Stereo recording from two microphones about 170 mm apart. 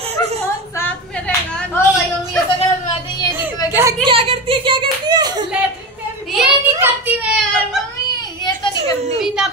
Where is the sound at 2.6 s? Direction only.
35° left (ahead or behind).